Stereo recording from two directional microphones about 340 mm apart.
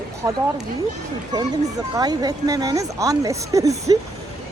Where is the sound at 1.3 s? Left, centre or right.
Centre.